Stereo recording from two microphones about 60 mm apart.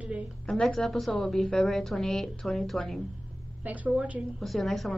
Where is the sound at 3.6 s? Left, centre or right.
Right.